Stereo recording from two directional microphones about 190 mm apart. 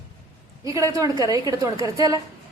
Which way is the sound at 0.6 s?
15° right (ahead or behind).